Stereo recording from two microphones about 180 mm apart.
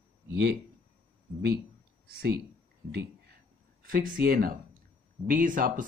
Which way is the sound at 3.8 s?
50° right (ahead or behind).